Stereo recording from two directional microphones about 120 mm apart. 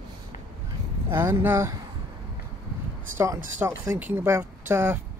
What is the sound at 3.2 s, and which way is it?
Speech, 25° right (ahead or behind).